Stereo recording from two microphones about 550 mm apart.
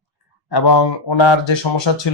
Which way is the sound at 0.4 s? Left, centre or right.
Left.